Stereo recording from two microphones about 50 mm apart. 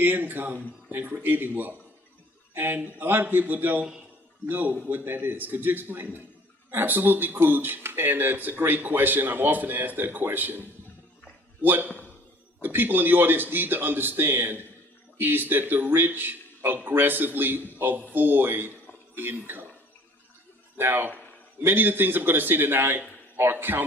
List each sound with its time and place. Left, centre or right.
0.0 s a man's voice: right
20.7 s a man's voice: right